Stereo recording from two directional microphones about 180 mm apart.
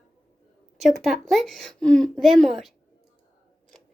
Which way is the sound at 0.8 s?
Centre (ahead or behind).